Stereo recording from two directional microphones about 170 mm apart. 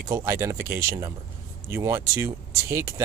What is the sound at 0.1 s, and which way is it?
Speech, 15° right (ahead or behind).